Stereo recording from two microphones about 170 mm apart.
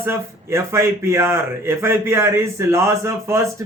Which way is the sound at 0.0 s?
15° right (ahead or behind).